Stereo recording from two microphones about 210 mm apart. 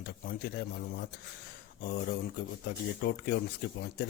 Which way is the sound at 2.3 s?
55° left (ahead or behind).